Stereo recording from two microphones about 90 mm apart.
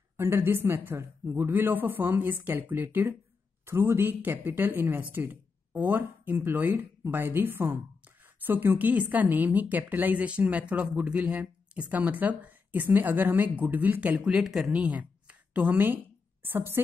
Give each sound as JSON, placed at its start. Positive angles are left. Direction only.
{"t": 0.2, "sound": "speech", "side_deg": -25}